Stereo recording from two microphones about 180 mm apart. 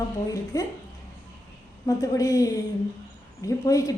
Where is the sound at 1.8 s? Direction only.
20° left (ahead or behind).